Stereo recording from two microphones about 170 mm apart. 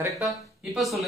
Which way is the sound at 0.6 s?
Centre (ahead or behind).